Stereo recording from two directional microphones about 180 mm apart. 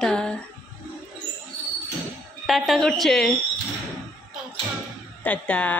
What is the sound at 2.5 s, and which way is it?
Speech, centre (ahead or behind).